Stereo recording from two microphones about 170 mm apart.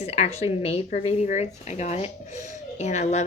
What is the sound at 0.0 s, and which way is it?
Speech, 40° left (ahead or behind).